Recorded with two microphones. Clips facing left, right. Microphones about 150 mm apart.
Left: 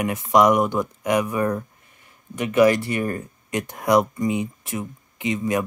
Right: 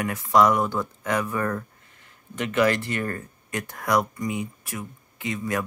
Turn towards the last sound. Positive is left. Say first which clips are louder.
# left 5 dB
turn(degrees=20)  # may be behind; listen again after turning